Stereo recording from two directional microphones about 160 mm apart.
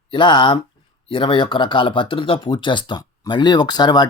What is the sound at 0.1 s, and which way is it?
Speech, 30° left (ahead or behind).